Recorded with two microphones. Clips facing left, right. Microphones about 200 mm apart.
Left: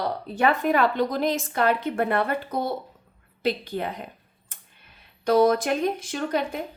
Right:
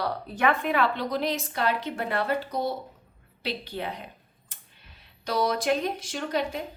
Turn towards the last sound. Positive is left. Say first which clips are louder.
# left 3 dB
turn(degrees=50)  # may be behind; listen again after turning